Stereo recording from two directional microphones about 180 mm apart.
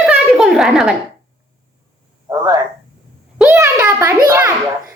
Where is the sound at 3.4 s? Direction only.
10° right (ahead or behind).